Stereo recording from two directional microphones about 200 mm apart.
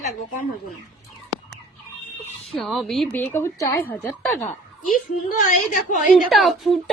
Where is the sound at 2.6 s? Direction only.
Centre (ahead or behind).